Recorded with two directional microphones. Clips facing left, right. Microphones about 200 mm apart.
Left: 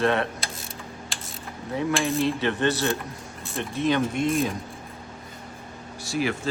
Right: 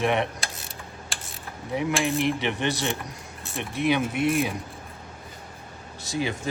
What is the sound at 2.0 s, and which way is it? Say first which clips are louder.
Speech: left 1 dB; 15° right (ahead or behind).